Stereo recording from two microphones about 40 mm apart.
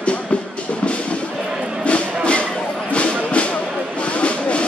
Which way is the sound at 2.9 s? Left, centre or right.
Left.